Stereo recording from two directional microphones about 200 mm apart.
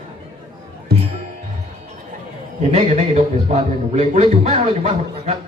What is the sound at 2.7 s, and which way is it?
Speech, 30° right (ahead or behind).